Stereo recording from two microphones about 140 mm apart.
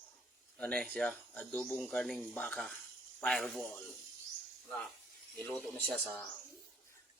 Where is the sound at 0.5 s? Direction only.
10° left (ahead or behind).